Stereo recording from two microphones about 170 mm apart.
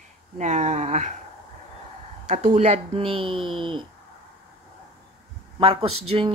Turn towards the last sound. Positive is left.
turn(degrees=-35)  # may be behind; listen again after turning